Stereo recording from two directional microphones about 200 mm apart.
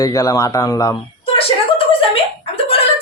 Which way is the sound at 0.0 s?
15° left (ahead or behind).